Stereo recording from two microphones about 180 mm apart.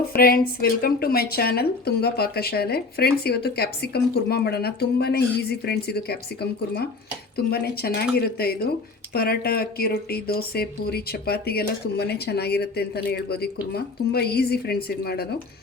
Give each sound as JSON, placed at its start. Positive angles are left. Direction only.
{"t": 0.2, "sound": "a woman's voice", "side_deg": 55}